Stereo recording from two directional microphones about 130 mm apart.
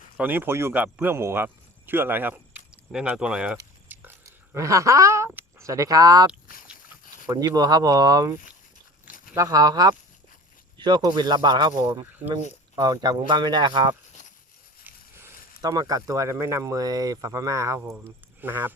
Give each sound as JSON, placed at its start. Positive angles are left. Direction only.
{"t": 0.2, "sound": "speech", "side_deg": -15}
{"t": 3.8, "sound": "a sound", "side_deg": -15}
{"t": 4.5, "sound": "speech", "side_deg": -25}
{"t": 7.3, "sound": "speech", "side_deg": -30}
{"t": 14.8, "sound": "a sound", "side_deg": -20}
{"t": 15.6, "sound": "speech", "side_deg": -30}